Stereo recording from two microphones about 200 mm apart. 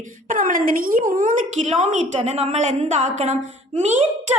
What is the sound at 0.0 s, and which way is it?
Child singing, 40° right (ahead or behind).